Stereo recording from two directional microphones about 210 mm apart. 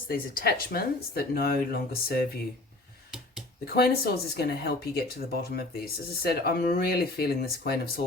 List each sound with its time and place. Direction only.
0.1 s speech: 45° left (ahead or behind)
3.8 s speech: 50° left (ahead or behind)